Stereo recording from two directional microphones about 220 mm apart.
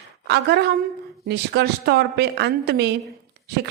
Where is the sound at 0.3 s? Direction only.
50° right (ahead or behind).